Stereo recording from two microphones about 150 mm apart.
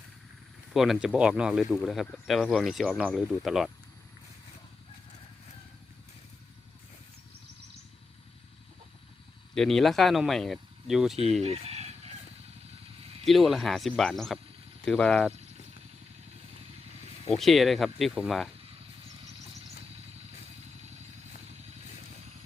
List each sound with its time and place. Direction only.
0.7 s speech: centre (ahead or behind)
9.6 s speech: centre (ahead or behind)
11.4 s chicken: 45° right (ahead or behind)
13.2 s speech: centre (ahead or behind)
17.3 s speech: centre (ahead or behind)